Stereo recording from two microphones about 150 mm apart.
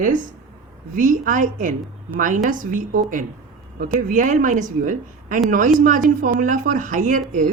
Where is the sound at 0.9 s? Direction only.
60° right (ahead or behind).